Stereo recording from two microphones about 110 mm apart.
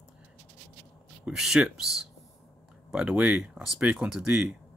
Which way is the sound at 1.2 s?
5° right (ahead or behind).